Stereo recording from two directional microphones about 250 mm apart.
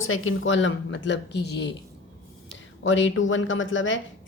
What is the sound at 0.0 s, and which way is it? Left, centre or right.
A woman's voice, left.